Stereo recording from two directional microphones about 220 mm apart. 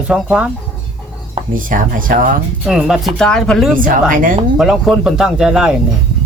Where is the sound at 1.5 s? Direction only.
40° right (ahead or behind).